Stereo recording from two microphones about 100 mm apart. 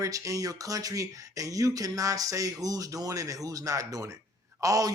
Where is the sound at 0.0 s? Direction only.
35° right (ahead or behind).